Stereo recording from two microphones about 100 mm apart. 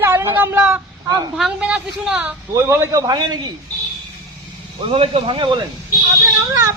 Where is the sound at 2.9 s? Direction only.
40° right (ahead or behind).